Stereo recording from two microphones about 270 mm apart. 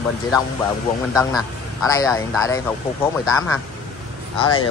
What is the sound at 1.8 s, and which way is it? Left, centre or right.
Speech, centre.